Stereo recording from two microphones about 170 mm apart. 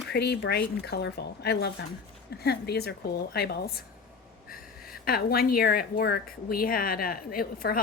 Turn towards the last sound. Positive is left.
turn(degrees=60)  # may be behind; listen again after turning